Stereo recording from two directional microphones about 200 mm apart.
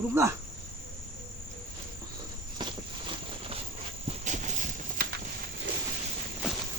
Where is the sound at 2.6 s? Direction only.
25° right (ahead or behind).